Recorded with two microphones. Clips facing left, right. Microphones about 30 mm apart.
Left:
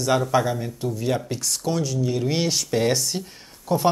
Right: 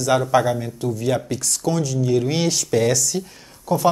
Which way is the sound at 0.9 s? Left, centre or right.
Centre.